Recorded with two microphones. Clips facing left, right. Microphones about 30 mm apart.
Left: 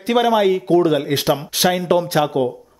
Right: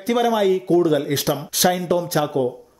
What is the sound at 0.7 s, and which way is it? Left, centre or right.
Speech, left.